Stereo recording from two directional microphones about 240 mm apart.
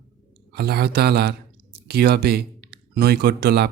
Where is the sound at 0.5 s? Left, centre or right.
Right.